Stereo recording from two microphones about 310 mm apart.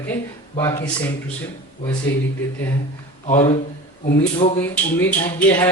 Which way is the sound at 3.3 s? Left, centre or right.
Left.